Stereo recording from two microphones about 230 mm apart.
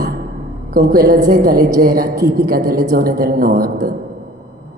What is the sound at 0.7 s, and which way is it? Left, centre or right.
A man's voice, right.